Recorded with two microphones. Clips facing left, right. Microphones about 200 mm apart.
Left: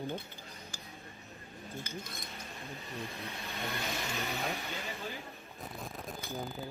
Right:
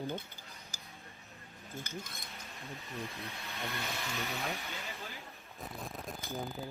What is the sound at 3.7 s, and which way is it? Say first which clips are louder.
Vehicle: left 3 dB; 15° left (ahead or behind).